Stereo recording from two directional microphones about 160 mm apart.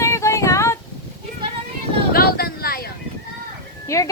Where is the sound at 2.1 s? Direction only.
70° left (ahead or behind).